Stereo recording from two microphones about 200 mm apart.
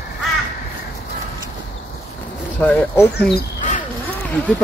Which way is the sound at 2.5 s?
5° left (ahead or behind).